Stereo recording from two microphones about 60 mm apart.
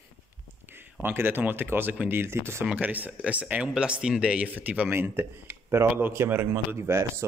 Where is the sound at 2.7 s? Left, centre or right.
Right.